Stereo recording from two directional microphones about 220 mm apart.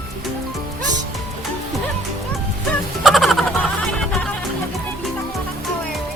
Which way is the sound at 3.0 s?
Centre (ahead or behind).